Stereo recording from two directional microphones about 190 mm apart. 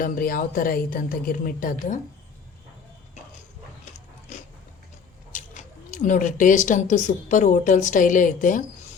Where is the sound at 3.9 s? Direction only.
40° left (ahead or behind).